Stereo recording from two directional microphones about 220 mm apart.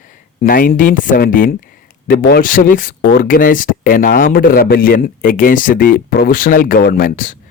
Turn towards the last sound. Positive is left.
turn(degrees=40)  # may be behind; listen again after turning